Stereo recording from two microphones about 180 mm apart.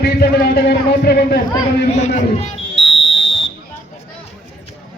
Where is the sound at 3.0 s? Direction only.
90° left.